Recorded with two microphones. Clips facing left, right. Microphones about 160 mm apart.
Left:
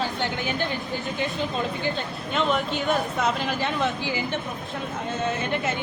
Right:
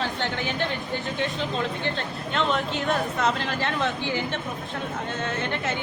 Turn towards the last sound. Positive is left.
turn(degrees=5)  # may be behind; listen again after turning